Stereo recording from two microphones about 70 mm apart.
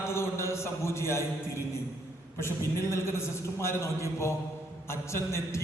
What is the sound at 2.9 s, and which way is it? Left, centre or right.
A man's voice, left.